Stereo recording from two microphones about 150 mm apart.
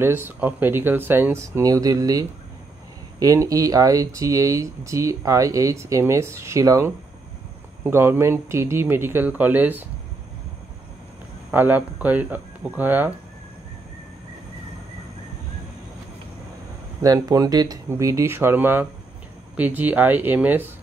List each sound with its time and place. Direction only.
0.0 s speech: 15° right (ahead or behind)
11.5 s speech: 10° right (ahead or behind)
17.0 s speech: 25° right (ahead or behind)